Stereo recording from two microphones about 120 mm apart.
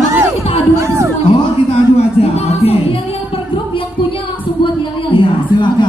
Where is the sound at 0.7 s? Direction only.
25° right (ahead or behind).